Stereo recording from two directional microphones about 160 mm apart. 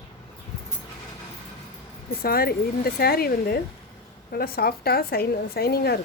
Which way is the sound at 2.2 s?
70° left (ahead or behind).